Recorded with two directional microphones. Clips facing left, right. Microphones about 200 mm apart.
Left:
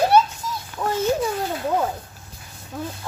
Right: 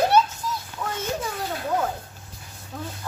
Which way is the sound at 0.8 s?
45° left (ahead or behind).